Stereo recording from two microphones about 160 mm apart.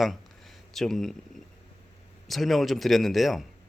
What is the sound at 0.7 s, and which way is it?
Speech, centre (ahead or behind).